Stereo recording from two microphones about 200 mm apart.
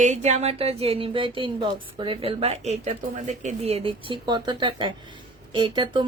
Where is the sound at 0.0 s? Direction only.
35° right (ahead or behind).